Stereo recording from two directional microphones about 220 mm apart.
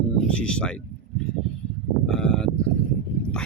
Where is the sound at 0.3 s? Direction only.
5° left (ahead or behind).